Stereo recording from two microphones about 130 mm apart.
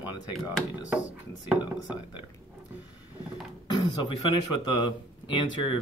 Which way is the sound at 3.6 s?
35° left (ahead or behind).